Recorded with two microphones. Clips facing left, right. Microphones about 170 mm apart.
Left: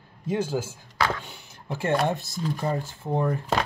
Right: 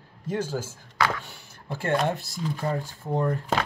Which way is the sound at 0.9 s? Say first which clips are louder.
Even; 25° left (ahead or behind).